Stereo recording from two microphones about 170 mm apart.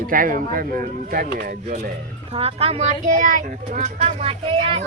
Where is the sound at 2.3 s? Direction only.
35° right (ahead or behind).